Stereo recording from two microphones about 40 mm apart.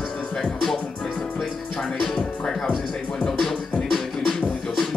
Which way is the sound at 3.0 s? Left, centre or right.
Left.